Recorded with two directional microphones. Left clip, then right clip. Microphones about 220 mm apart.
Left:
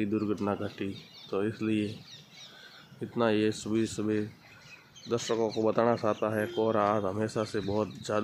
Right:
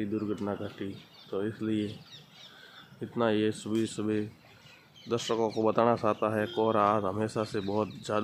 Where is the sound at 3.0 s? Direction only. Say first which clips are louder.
Left 1 dB; centre (ahead or behind).